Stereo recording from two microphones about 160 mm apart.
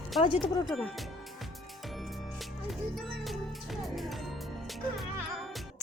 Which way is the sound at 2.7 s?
Centre (ahead or behind).